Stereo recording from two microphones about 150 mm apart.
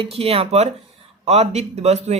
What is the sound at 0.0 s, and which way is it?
Speech, 40° right (ahead or behind).